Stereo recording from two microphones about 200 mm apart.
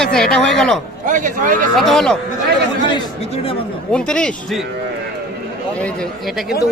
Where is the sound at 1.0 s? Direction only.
40° right (ahead or behind).